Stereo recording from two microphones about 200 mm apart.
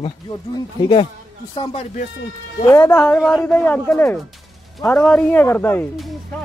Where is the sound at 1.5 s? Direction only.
30° left (ahead or behind).